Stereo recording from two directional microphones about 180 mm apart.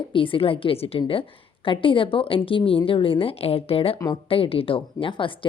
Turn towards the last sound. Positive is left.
turn(degrees=30)  # may be behind; listen again after turning